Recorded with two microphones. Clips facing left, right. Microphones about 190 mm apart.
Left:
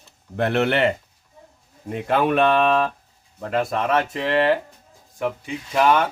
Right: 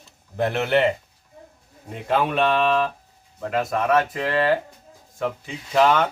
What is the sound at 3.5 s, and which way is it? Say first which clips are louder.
Speech: even; 30° left (ahead or behind).